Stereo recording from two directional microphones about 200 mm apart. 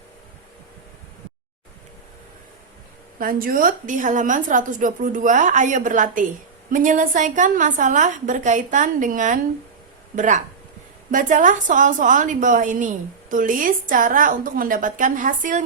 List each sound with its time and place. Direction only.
3.2 s a woman's voice: 45° right (ahead or behind)